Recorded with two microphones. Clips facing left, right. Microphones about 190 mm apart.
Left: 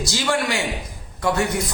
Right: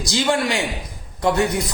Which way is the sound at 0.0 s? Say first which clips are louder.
Right 2 dB; 20° right (ahead or behind).